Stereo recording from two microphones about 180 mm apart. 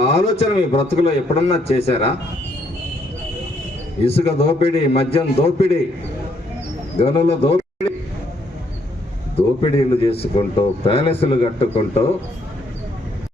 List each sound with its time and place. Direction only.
0.0 s a man's voice: 35° left (ahead or behind)
4.0 s a man's voice: 35° left (ahead or behind)
7.0 s a man's voice: 35° left (ahead or behind)
9.3 s a man's voice: 35° left (ahead or behind)